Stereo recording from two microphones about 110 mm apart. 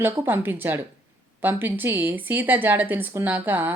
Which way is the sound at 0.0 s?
20° right (ahead or behind).